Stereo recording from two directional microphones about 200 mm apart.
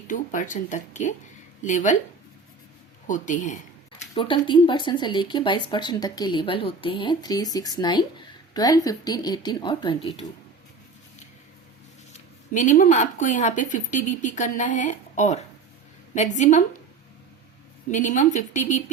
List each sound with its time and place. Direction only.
0.1 s speech: 40° left (ahead or behind)
3.1 s speech: 40° left (ahead or behind)
4.1 s speech: 25° left (ahead or behind)
12.1 s speech: 40° left (ahead or behind)
17.9 s speech: 40° left (ahead or behind)